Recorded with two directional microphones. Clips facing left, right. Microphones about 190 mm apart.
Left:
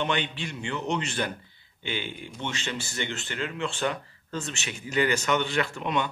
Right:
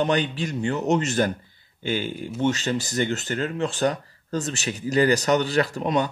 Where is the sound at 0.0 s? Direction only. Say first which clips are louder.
Right 6 dB; 40° right (ahead or behind).